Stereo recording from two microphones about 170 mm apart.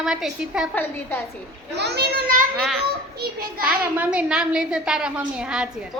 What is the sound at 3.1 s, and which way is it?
Speech, 60° right (ahead or behind).